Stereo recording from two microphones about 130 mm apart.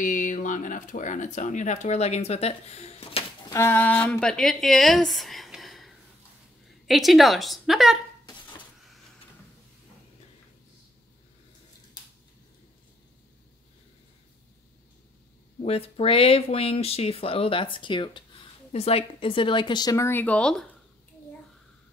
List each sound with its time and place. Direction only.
0.0 s speech: 80° left; by 3.3 s 50° left (ahead or behind)
3.4 s a woman's voice: 20° left (ahead or behind); by 8.0 s centre (ahead or behind)
15.6 s speech: 50° left (ahead or behind)
18.7 s a woman's voice: 50° left (ahead or behind); by 20.1 s 30° left (ahead or behind)
20.1 s speech: 15° left (ahead or behind)